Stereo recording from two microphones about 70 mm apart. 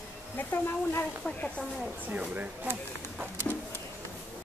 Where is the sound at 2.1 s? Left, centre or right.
Right.